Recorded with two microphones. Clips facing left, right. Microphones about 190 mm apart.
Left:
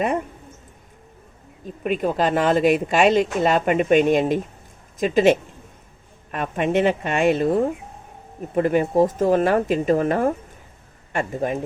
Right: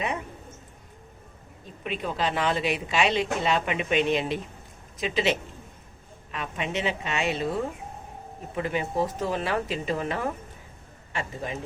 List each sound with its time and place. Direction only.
0.0 s speech: 50° left (ahead or behind)
1.8 s speech: 50° left (ahead or behind)